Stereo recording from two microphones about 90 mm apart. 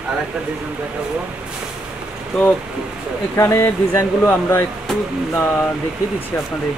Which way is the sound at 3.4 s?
30° left (ahead or behind).